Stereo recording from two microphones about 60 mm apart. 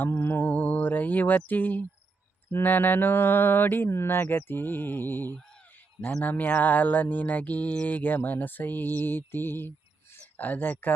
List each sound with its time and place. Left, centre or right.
0.0 s mantra: left
5.4 s a sound: centre
6.0 s speech: centre
6.2 s speech: left
7.9 s mantra: left
10.3 s speech: left